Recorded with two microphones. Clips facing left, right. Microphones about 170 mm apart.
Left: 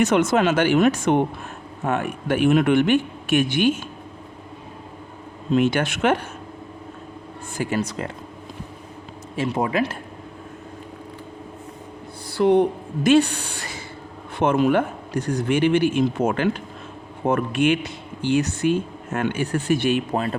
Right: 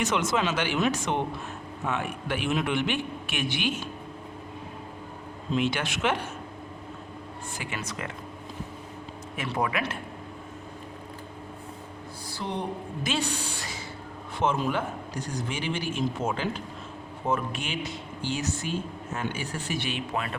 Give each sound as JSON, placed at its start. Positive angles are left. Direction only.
{"t": 0.1, "sound": "speech", "side_deg": 55}
{"t": 5.5, "sound": "speech", "side_deg": 50}
{"t": 7.6, "sound": "speech", "side_deg": 35}
{"t": 9.3, "sound": "speech", "side_deg": 30}
{"t": 12.4, "sound": "speech", "side_deg": 60}